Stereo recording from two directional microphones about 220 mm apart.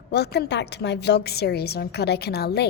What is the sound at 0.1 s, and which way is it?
A woman's voice, 50° left (ahead or behind).